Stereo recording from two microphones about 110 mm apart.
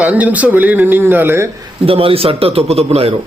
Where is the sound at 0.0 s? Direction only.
15° right (ahead or behind).